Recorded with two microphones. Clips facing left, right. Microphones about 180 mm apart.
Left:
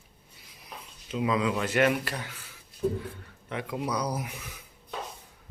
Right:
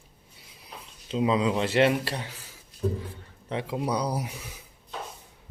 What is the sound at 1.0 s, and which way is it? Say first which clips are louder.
Speech: right 3 dB; 25° right (ahead or behind).